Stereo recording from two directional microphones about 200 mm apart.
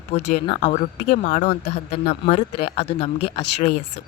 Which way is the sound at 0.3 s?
30° left (ahead or behind).